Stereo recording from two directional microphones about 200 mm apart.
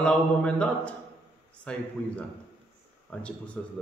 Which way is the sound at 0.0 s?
5° left (ahead or behind).